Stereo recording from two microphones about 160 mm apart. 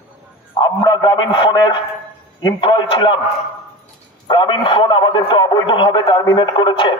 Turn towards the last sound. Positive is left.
turn(degrees=30)  # may be behind; listen again after turning